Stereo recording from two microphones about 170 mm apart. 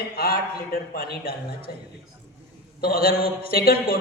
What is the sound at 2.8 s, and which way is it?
A woman's voice, 60° left (ahead or behind).